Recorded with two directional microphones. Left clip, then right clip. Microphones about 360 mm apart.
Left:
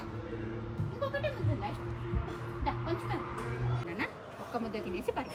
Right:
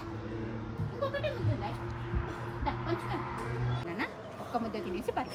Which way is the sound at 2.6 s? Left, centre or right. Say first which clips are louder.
Even; centre.